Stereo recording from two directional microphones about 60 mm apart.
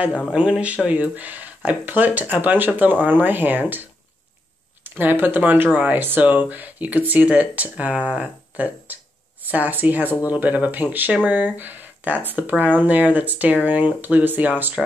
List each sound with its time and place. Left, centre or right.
0.3 s speech: centre; by 3.8 s right
4.8 s speech: right